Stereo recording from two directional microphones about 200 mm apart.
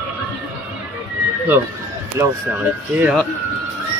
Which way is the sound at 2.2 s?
15° right (ahead or behind).